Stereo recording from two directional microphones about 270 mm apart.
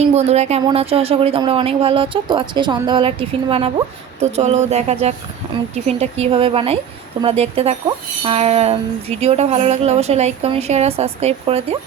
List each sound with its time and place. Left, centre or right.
0.0 s speech: right